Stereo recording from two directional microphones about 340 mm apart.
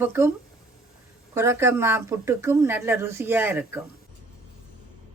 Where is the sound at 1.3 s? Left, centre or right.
Centre.